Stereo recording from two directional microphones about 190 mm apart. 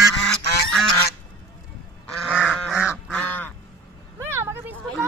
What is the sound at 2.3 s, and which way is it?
Goose, 5° right (ahead or behind).